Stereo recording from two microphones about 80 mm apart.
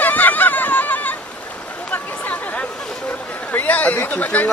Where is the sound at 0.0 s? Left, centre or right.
Left.